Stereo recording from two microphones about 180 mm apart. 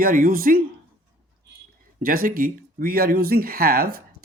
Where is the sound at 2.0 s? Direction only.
55° right (ahead or behind).